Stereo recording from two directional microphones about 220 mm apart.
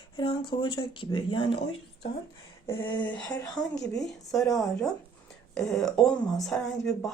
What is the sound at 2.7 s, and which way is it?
Speech, 20° left (ahead or behind).